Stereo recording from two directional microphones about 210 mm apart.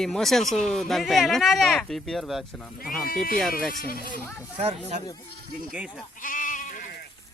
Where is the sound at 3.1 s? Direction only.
45° left (ahead or behind).